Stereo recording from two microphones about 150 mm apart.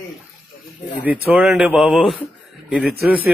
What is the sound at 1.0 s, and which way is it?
Speech, 10° right (ahead or behind).